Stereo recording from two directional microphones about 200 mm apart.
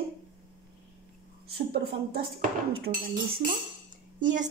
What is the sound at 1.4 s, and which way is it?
Speech, 50° right (ahead or behind).